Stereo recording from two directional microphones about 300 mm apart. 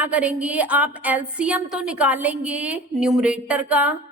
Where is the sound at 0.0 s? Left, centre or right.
Centre.